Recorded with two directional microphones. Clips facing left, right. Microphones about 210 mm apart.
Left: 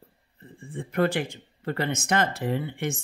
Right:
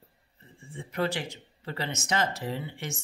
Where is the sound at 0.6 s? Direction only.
55° left (ahead or behind).